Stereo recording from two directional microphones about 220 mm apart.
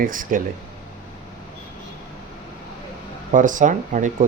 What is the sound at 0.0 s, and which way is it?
Speech, 40° right (ahead or behind).